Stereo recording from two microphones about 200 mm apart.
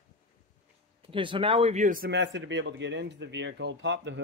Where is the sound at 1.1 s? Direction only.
25° right (ahead or behind).